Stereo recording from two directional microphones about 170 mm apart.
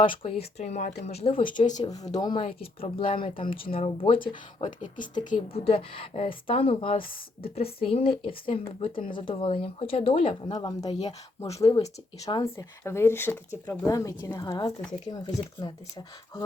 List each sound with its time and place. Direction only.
0.0 s speech: 30° left (ahead or behind)
1.8 s speech: 20° left (ahead or behind)